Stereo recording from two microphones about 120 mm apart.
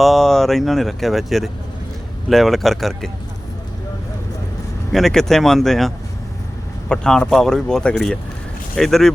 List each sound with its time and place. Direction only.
0.0 s speech: centre (ahead or behind)
4.9 s speech: centre (ahead or behind)